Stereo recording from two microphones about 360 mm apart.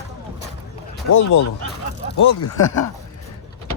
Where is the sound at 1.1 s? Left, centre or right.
Left.